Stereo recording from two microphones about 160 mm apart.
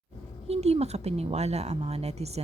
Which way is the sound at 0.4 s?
40° right (ahead or behind).